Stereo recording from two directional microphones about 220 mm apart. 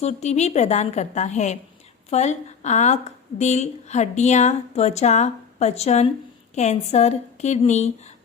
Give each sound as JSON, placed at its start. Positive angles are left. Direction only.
{"t": 0.0, "sound": "a woman's voice", "side_deg": 30}